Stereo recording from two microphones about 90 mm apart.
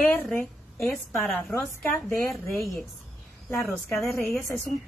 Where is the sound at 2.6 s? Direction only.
Centre (ahead or behind).